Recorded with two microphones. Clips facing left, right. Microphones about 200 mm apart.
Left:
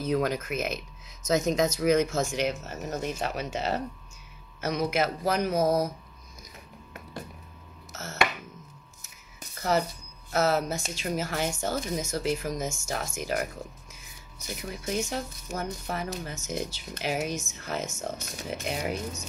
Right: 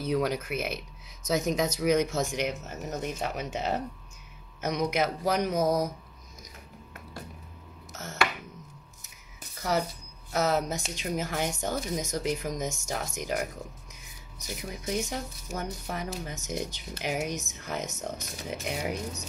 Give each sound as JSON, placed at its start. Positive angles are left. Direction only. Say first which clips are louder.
{"t": 0.0, "sound": "speech", "louder": "left 1 dB", "side_deg": -15}
{"t": 7.9, "sound": "a sound", "louder": "left 1 dB", "side_deg": -15}
{"t": 10.3, "sound": "speech", "louder": "left 2 dB", "side_deg": -15}
{"t": 14.7, "sound": "speech", "louder": "left 1 dB", "side_deg": -15}